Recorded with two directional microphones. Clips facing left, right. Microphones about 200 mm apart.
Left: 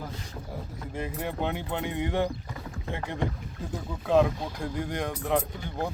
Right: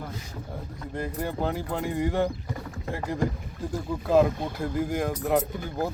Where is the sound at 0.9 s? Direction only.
Centre (ahead or behind).